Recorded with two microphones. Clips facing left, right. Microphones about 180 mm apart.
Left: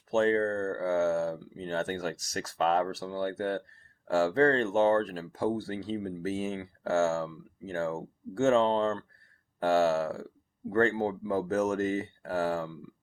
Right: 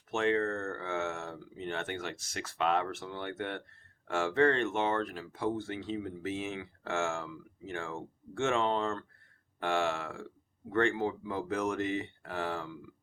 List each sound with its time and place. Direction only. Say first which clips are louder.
0.1 s speech: left 4 dB; 40° left (ahead or behind)